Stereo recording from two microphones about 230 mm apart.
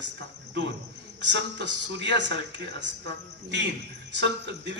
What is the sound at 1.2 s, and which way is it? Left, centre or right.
Speech, right.